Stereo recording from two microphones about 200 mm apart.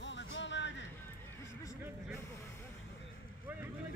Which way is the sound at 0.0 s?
65° left (ahead or behind).